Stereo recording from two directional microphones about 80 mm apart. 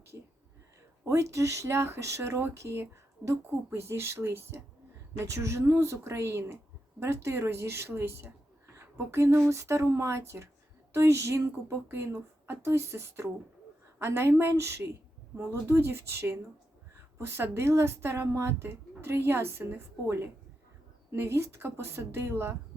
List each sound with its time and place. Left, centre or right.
1.0 s speech: right
21.1 s speech: right